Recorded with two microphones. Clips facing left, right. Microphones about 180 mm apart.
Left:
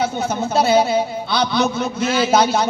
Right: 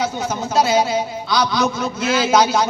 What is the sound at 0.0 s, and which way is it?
A man's voice, 60° left (ahead or behind).